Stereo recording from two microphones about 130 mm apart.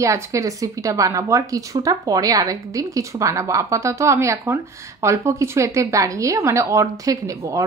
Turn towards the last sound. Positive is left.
turn(degrees=-25)  # may be behind; listen again after turning